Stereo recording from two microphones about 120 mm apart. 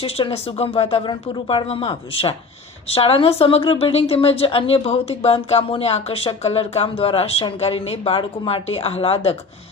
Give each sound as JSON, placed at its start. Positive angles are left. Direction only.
{"t": 0.0, "sound": "speech", "side_deg": 50}
{"t": 1.0, "sound": "a woman's voice", "side_deg": 45}